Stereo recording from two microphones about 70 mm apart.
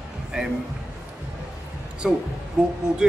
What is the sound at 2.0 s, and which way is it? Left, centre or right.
Speech, centre.